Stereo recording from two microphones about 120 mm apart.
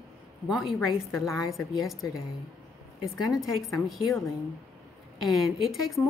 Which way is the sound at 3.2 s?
Centre (ahead or behind).